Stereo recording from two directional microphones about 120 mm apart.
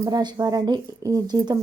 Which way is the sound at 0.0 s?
35° right (ahead or behind).